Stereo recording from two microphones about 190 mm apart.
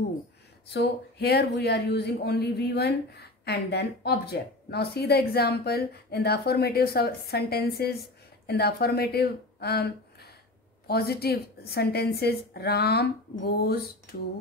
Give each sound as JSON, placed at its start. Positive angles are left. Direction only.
{"t": 0.7, "sound": "speech", "side_deg": 60}
{"t": 10.9, "sound": "speech", "side_deg": 55}